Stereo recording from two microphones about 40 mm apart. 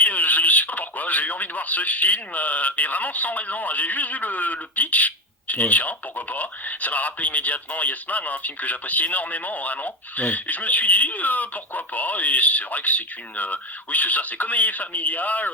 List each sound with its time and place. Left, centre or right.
0.0 s speech: left